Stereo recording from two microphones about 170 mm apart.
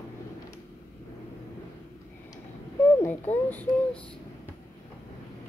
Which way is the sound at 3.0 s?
10° left (ahead or behind).